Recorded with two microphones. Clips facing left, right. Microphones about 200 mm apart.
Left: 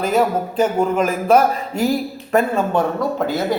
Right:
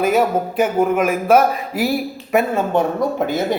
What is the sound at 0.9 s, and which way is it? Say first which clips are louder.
A man's voice: even; 5° right (ahead or behind).